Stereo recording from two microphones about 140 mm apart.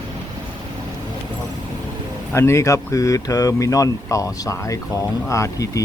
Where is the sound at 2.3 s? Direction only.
20° left (ahead or behind).